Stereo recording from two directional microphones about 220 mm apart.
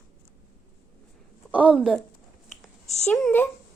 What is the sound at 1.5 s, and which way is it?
Speech, 5° right (ahead or behind).